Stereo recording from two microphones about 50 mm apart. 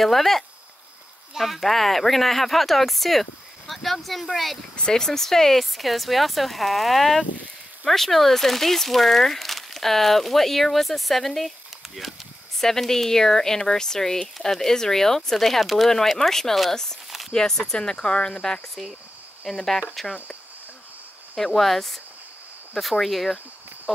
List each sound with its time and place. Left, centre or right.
0.0 s speech: centre
4.7 s speech: centre
21.5 s speech: centre